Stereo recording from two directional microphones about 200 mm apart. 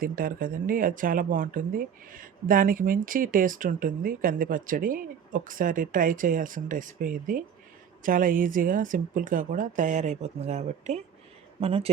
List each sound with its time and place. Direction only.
0.0 s speech: 45° right (ahead or behind); by 11.9 s 30° right (ahead or behind)